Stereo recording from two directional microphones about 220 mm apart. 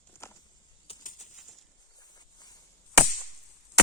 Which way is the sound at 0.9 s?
35° left (ahead or behind).